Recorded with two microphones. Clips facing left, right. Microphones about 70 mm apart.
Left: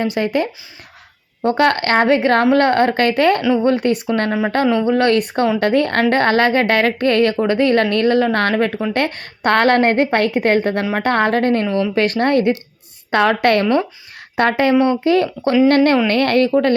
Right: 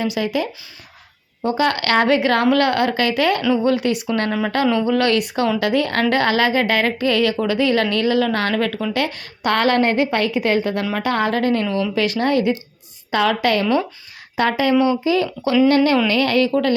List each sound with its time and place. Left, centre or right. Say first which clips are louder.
0.0 s a woman's voice: left 3 dB; left
1.5 s a woman's voice: left 4 dB; left
1.8 s a woman's voice: left 2 dB; left
8.9 s a woman's voice: left 3 dB; left